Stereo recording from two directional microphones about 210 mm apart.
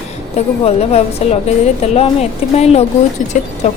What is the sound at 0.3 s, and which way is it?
A woman's voice, 30° left (ahead or behind).